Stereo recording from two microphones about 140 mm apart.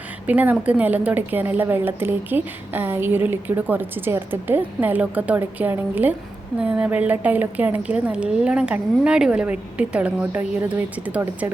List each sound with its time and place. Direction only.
0.3 s a woman's voice: 10° right (ahead or behind)